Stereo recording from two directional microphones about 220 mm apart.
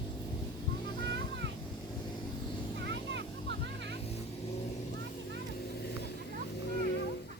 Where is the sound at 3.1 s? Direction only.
55° right (ahead or behind).